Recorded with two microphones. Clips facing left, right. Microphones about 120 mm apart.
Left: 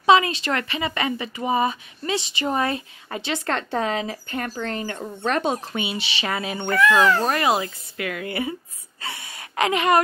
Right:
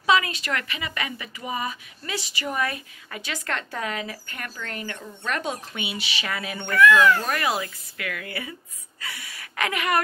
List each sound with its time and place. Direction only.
0.0 s a woman's voice: 25° left (ahead or behind)